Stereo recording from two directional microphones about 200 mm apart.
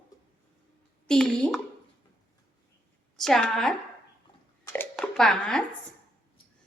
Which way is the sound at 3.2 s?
Centre (ahead or behind).